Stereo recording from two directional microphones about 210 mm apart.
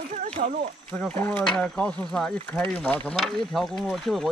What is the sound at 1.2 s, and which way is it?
Speech, 5° left (ahead or behind).